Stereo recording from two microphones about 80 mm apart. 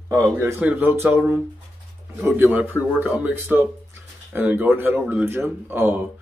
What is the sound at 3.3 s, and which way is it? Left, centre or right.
A man's voice, right.